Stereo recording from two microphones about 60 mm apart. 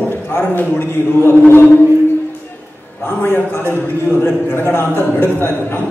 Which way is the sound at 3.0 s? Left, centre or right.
Left.